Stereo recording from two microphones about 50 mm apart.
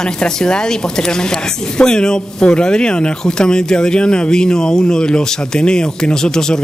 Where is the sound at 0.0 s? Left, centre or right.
Centre.